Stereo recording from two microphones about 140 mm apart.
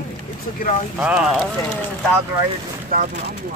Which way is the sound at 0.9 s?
5° right (ahead or behind).